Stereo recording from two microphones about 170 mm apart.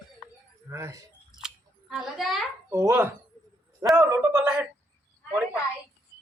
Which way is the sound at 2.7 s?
15° right (ahead or behind).